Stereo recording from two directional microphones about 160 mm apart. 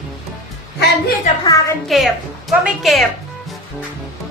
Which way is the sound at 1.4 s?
20° left (ahead or behind).